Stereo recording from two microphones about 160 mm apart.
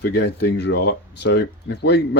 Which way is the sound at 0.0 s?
90° left.